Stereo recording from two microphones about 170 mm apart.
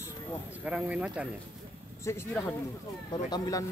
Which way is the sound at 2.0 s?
15° left (ahead or behind).